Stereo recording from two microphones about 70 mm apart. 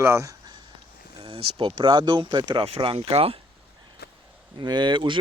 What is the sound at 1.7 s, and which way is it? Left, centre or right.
Speech, right.